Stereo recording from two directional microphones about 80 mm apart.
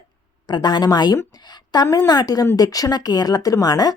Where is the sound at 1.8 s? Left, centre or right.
Left.